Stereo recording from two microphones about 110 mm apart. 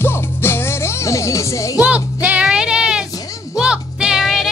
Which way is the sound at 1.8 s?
15° right (ahead or behind).